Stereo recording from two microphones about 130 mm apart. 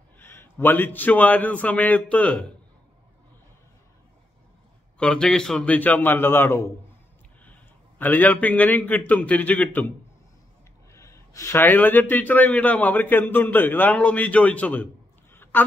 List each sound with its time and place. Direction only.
0.2 s a man's voice: 15° left (ahead or behind)
4.9 s a man's voice: 5° left (ahead or behind)
10.9 s a man's voice: 20° left (ahead or behind)
15.3 s a sound: 15° left (ahead or behind)